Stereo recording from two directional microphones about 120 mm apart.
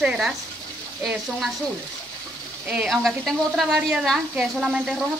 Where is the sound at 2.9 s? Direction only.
Centre (ahead or behind).